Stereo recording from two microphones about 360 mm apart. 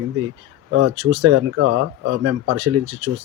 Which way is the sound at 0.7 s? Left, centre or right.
Right.